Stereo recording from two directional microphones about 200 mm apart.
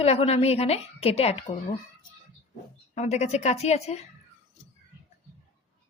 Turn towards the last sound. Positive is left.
turn(degrees=35)  # may be behind; listen again after turning